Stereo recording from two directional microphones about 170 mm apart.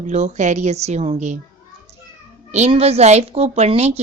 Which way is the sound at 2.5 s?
40° right (ahead or behind).